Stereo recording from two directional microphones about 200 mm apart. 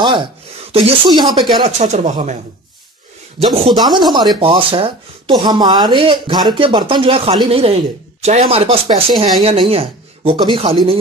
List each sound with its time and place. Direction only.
0.0 s speech: 25° right (ahead or behind)
1.5 s speech: 30° right (ahead or behind)
3.3 s speech: 30° right (ahead or behind)